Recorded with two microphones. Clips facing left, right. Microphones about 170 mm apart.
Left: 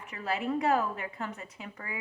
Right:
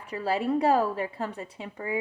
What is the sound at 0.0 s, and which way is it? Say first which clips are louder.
A woman's voice: right 5 dB; 35° right (ahead or behind).